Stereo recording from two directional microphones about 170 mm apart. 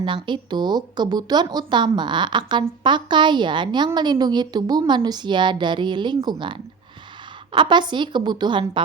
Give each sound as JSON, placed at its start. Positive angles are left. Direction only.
{"t": 0.0, "sound": "speech", "side_deg": -30}